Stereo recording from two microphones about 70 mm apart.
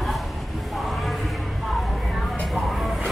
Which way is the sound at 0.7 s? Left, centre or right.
Centre.